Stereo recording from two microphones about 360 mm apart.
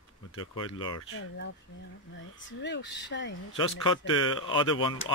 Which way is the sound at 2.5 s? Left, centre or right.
Left.